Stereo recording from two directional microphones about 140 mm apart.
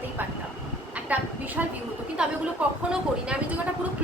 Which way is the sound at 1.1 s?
10° right (ahead or behind).